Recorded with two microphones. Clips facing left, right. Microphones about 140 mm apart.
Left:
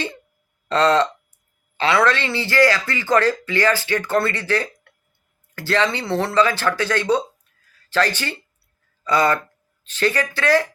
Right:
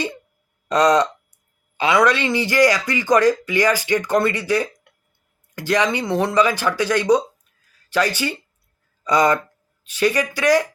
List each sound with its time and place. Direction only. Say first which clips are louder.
0.7 s speech: right 1 dB; 15° right (ahead or behind)